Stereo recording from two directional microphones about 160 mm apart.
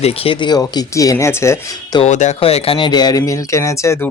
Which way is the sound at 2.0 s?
45° left (ahead or behind).